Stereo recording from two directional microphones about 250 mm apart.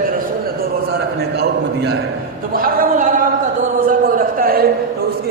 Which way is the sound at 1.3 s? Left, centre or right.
Right.